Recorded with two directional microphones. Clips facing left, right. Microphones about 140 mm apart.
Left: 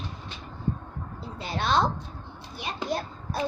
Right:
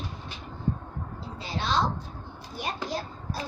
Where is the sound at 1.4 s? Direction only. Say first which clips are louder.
Left 3 dB; 55° left (ahead or behind).